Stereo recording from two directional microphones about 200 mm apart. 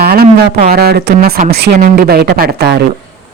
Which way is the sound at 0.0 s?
50° right (ahead or behind).